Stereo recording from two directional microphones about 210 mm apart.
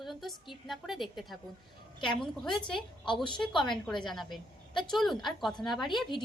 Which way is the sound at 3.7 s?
Centre (ahead or behind).